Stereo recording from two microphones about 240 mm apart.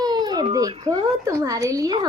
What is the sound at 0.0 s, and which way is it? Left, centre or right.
Baby cry, centre.